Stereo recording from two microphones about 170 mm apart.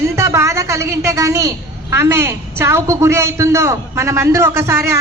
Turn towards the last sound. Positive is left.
turn(degrees=-15)  # may be behind; listen again after turning